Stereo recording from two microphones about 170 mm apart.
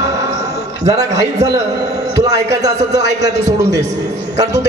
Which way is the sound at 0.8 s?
20° right (ahead or behind).